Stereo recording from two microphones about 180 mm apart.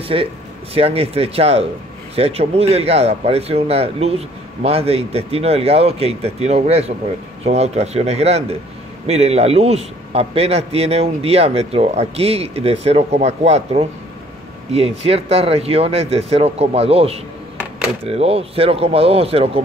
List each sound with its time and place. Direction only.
0.1 s a man's voice: 25° right (ahead or behind)